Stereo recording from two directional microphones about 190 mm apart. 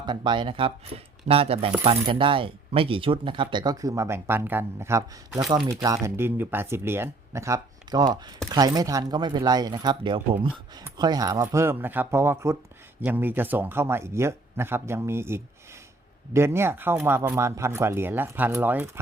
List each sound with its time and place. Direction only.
0.0 s speech: 25° right (ahead or behind)